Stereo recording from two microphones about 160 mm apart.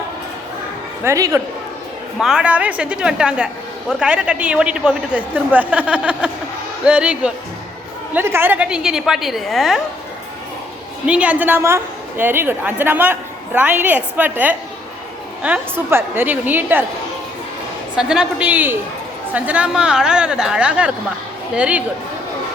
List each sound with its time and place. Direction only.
1.0 s a man's voice: 20° right (ahead or behind)
2.1 s a woman's voice: 5° right (ahead or behind)
11.0 s a woman's voice: 10° right (ahead or behind)
17.9 s a woman's voice: 5° right (ahead or behind)